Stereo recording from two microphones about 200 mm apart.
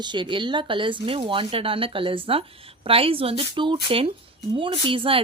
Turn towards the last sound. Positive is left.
turn(degrees=-25)  # may be behind; listen again after turning